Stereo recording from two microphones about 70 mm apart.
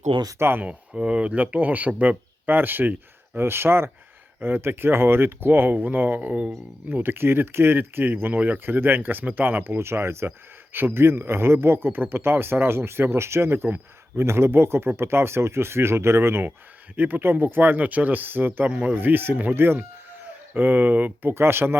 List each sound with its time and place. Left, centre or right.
0.3 s speech: right
0.6 s speech: centre
6.9 s speech: right
18.9 s speech: right